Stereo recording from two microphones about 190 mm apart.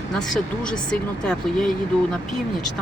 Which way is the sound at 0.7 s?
5° left (ahead or behind).